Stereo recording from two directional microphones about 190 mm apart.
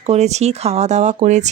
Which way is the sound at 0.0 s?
35° right (ahead or behind).